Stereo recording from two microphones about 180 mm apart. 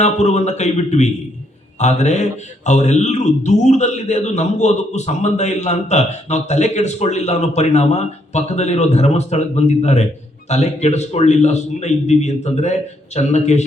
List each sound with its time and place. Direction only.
0.0 s a man's voice: 40° left (ahead or behind)